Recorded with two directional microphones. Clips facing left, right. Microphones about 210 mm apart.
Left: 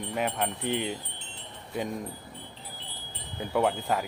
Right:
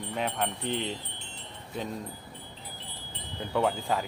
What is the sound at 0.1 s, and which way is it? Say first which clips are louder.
Speech: left 1 dB; 5° left (ahead or behind).